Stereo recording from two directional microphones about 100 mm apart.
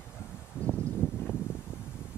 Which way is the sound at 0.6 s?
15° left (ahead or behind).